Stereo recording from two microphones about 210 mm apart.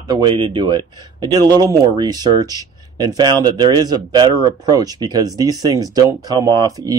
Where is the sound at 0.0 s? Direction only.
20° right (ahead or behind).